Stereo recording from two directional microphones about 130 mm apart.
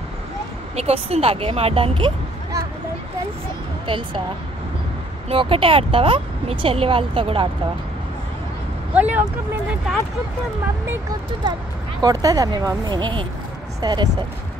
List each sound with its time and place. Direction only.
0.7 s speech: 50° right (ahead or behind)
3.8 s speech: 40° right (ahead or behind)
5.3 s speech: 45° right (ahead or behind)
8.9 s speech: 10° right (ahead or behind)
11.4 s speech: 35° right (ahead or behind)